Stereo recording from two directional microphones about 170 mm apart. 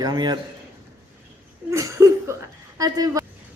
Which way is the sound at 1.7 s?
20° right (ahead or behind).